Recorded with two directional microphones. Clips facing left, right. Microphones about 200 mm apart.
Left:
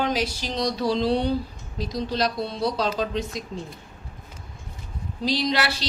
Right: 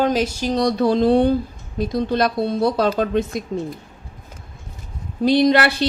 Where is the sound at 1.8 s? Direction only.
55° right (ahead or behind).